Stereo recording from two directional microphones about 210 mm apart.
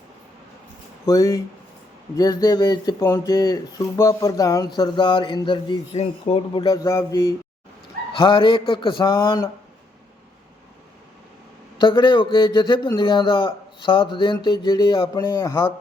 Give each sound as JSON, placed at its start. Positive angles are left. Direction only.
{"t": 1.0, "sound": "speech", "side_deg": 15}
{"t": 8.2, "sound": "speech", "side_deg": 25}
{"t": 11.8, "sound": "speech", "side_deg": 20}